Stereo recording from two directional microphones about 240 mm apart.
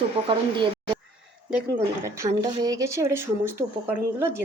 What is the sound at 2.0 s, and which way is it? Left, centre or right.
Speech, centre.